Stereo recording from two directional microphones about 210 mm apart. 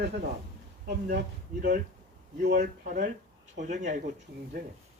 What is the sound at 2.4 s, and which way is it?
Speech, 45° right (ahead or behind).